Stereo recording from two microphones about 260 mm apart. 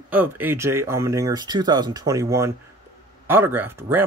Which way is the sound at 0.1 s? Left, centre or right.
Centre.